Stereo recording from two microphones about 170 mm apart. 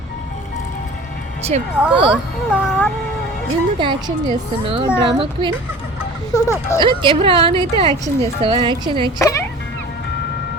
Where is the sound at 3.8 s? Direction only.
30° right (ahead or behind).